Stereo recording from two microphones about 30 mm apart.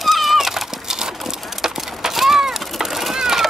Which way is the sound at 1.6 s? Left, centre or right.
Centre.